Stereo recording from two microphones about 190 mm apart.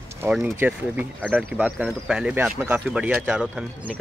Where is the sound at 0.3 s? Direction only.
5° right (ahead or behind).